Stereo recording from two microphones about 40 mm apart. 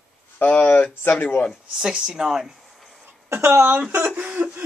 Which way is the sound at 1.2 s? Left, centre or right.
Left.